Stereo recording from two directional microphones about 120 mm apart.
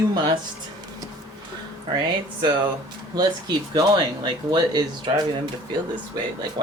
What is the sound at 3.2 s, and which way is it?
Speech, 35° right (ahead or behind).